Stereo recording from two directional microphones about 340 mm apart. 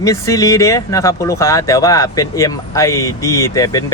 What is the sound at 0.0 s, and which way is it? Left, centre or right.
Speech, centre.